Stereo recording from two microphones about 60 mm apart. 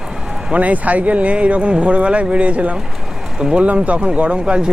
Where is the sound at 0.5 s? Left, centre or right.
Right.